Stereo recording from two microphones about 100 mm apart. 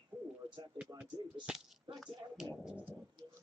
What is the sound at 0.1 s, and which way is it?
Bird, 20° right (ahead or behind).